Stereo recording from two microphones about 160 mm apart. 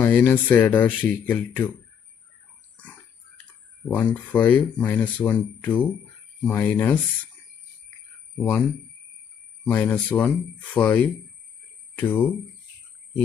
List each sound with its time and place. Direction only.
0.0 s speech: 15° left (ahead or behind)
3.8 s speech: 10° left (ahead or behind)
8.4 s speech: 10° left (ahead or behind)
9.7 s speech: 10° left (ahead or behind)